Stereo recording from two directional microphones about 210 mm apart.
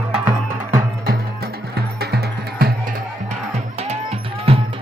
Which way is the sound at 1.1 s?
50° right (ahead or behind).